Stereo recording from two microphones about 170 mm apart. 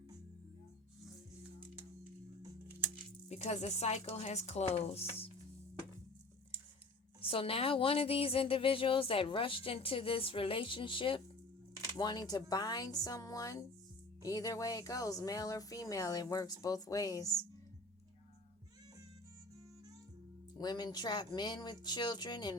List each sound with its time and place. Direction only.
3.2 s a woman's voice: 40° left (ahead or behind)
7.2 s a woman's voice: 30° left (ahead or behind)
20.6 s speech: 25° left (ahead or behind)